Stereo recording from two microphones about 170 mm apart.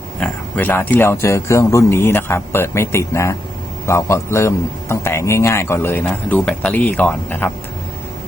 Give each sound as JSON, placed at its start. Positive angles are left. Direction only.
{"t": 0.2, "sound": "a man's voice", "side_deg": 10}